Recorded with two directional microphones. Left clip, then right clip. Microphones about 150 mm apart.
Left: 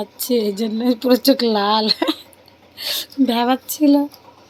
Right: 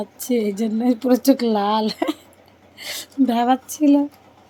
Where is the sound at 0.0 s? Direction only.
5° right (ahead or behind).